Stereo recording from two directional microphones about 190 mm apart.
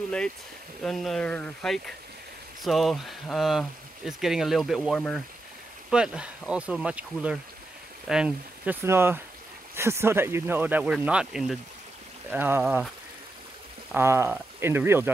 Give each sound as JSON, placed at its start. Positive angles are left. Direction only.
{"t": 0.8, "sound": "speech", "side_deg": 0}
{"t": 13.9, "sound": "speech", "side_deg": -15}